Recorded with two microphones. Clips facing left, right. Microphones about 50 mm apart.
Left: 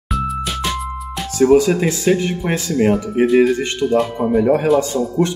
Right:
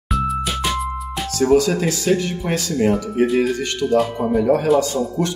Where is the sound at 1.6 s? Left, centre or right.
Left.